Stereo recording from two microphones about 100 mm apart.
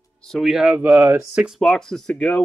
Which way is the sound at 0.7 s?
20° right (ahead or behind).